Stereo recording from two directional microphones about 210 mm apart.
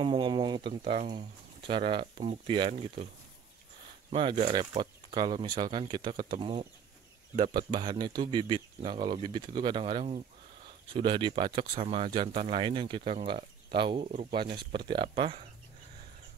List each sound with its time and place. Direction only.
0.0 s speech: 25° right (ahead or behind)
4.1 s speech: 25° right (ahead or behind)